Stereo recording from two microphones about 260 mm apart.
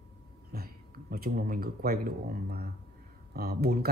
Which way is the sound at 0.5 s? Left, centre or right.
Right.